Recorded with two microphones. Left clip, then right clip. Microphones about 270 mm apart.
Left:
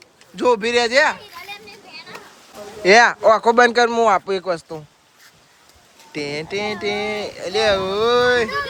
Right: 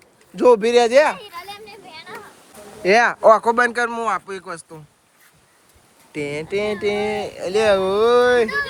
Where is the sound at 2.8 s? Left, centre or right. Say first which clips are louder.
Left 2 dB; centre.